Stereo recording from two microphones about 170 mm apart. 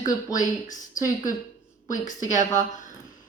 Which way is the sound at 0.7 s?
50° left (ahead or behind).